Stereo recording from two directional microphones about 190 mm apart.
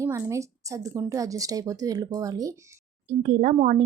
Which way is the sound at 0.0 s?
15° right (ahead or behind).